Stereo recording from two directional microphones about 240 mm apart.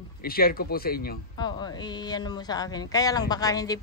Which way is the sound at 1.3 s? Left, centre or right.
Centre.